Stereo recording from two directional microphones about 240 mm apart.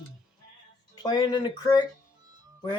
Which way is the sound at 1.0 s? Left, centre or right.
Centre.